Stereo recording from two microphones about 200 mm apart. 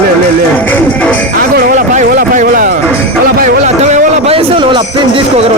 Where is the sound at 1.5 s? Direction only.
45° right (ahead or behind); by 5.2 s 25° right (ahead or behind).